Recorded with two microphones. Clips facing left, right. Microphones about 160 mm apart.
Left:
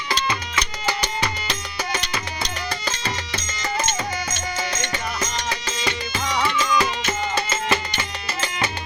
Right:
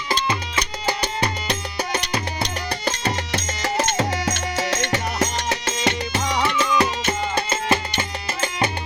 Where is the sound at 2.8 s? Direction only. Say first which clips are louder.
Right 4 dB; 60° right (ahead or behind).